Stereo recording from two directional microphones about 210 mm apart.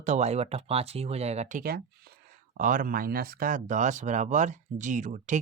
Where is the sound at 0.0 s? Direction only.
35° right (ahead or behind).